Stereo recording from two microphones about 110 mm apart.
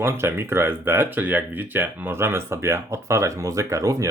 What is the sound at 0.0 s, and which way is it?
Speech, 20° right (ahead or behind).